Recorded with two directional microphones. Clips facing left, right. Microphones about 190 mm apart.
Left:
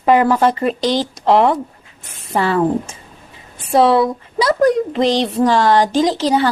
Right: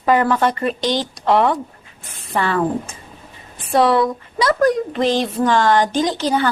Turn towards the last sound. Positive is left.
turn(degrees=25)  # may be behind; listen again after turning